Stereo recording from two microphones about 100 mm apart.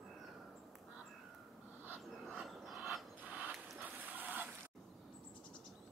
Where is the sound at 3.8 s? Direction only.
15° right (ahead or behind).